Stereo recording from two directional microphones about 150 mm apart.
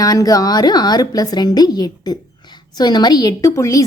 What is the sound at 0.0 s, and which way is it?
A woman's voice, 25° left (ahead or behind).